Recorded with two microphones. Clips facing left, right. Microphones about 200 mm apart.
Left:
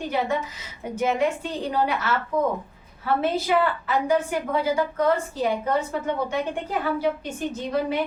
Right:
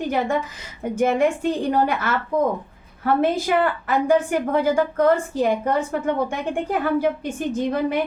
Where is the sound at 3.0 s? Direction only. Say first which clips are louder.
Right 3 dB; 55° right (ahead or behind).